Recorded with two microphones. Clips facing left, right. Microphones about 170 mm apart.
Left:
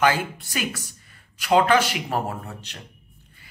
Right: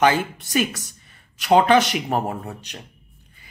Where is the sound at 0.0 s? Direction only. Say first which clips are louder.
Right 3 dB; 20° right (ahead or behind).